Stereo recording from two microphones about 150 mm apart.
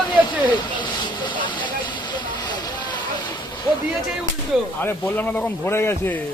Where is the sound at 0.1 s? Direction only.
30° left (ahead or behind).